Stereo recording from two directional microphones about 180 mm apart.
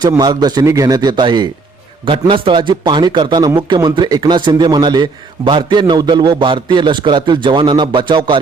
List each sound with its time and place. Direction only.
0.0 s a man's voice: 25° right (ahead or behind)